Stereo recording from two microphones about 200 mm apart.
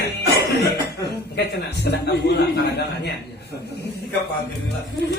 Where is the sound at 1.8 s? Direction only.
60° left (ahead or behind).